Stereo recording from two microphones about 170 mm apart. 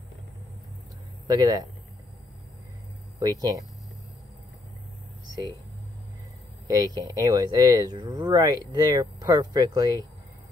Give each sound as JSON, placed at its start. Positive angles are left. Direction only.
{"t": 1.2, "sound": "speech", "side_deg": -25}
{"t": 3.2, "sound": "speech", "side_deg": -20}
{"t": 6.7, "sound": "speech", "side_deg": -25}